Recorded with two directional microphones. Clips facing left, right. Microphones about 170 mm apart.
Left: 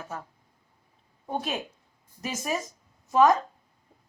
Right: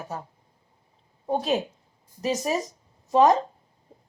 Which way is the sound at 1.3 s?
30° right (ahead or behind).